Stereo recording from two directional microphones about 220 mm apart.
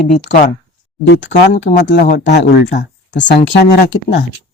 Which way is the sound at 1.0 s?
55° left (ahead or behind).